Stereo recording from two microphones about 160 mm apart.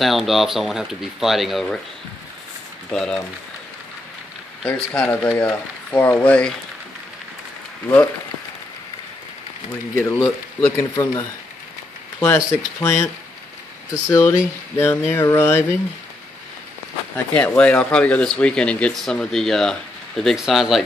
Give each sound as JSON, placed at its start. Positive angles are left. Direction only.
{"t": 0.0, "sound": "speech", "side_deg": 0}
{"t": 2.9, "sound": "speech", "side_deg": 5}
{"t": 4.6, "sound": "speech", "side_deg": 5}
{"t": 9.9, "sound": "speech", "side_deg": 15}
{"t": 14.0, "sound": "speech", "side_deg": 20}
{"t": 17.3, "sound": "speech", "side_deg": 10}